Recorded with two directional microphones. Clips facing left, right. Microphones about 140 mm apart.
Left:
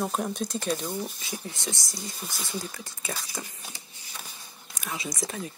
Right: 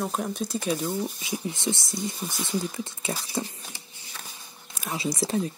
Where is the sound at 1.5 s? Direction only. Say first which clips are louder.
Right 6 dB; 25° right (ahead or behind).